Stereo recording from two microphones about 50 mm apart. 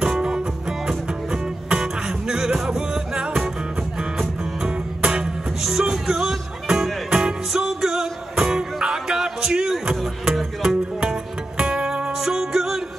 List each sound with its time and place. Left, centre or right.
0.0 s music: centre
4.6 s music: centre